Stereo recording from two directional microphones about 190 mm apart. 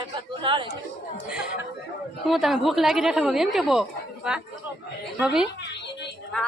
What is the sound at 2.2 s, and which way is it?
A woman's voice, centre (ahead or behind).